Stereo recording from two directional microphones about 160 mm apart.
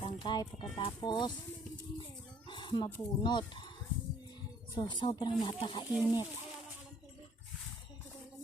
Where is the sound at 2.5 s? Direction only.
30° left (ahead or behind).